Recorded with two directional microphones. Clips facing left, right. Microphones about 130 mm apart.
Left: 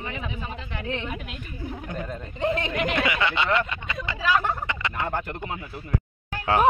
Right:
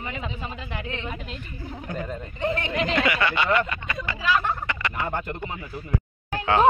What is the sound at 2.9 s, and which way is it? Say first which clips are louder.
Speech: right 3 dB; 20° left (ahead or behind).